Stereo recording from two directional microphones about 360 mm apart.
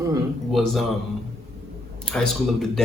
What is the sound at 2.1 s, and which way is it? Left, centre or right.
Speech, centre.